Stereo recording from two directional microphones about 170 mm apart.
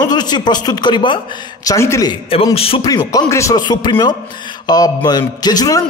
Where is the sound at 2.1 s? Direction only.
35° left (ahead or behind).